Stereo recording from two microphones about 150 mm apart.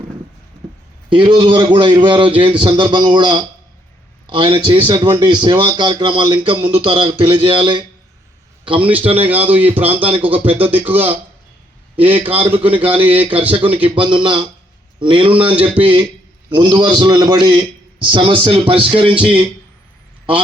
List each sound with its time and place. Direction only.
1.1 s a man's voice: 35° right (ahead or behind)
9.2 s speech: 10° right (ahead or behind)
13.8 s a man's voice: 35° right (ahead or behind)
15.4 s speech: 10° right (ahead or behind)
15.8 s a man's voice: 35° right (ahead or behind)